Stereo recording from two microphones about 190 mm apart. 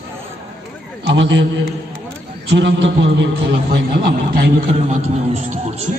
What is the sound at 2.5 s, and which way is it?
A man's voice, 65° right (ahead or behind).